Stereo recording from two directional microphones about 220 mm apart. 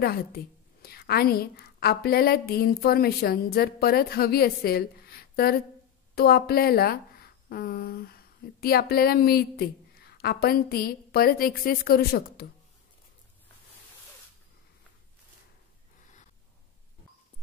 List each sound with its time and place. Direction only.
0.0 s speech: 45° left (ahead or behind)